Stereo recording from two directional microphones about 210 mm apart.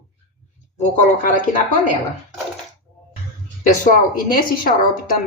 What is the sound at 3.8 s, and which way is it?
Speech, 40° left (ahead or behind).